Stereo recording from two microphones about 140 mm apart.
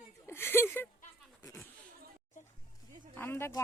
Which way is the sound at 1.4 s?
25° left (ahead or behind).